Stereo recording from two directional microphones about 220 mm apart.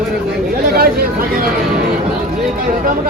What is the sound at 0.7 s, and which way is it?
Speech, 45° right (ahead or behind).